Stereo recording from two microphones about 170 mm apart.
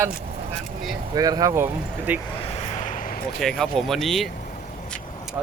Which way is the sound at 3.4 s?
Centre (ahead or behind).